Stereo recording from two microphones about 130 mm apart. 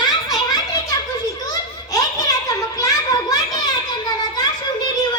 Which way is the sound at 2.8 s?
30° left (ahead or behind).